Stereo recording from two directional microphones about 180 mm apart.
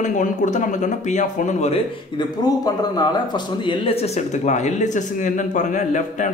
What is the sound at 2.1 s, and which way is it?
A man's voice, 20° left (ahead or behind).